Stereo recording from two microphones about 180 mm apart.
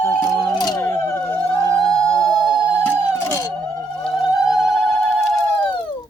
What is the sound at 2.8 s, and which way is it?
Music, 10° left (ahead or behind).